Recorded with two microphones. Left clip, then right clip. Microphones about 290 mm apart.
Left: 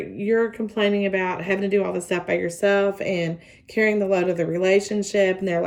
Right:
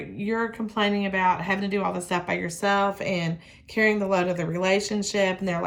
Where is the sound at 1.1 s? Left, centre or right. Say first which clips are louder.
Right 1 dB; right.